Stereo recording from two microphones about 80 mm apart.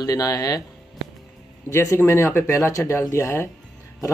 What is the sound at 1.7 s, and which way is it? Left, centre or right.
Speech, left.